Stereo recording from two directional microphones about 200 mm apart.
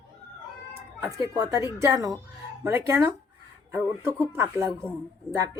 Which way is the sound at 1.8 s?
15° right (ahead or behind).